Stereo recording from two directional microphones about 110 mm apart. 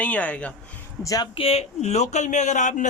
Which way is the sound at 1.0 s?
35° left (ahead or behind).